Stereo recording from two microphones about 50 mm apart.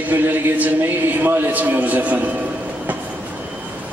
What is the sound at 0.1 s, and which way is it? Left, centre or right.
A man's voice, right.